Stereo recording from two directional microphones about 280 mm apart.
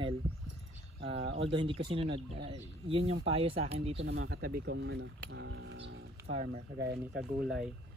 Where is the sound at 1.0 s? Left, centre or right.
Right.